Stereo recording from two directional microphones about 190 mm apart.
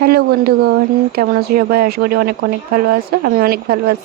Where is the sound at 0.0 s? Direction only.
55° right (ahead or behind).